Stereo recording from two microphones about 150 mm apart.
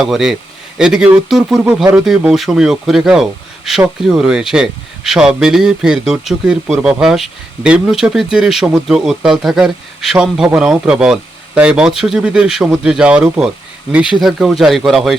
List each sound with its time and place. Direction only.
0.0 s speech: centre (ahead or behind)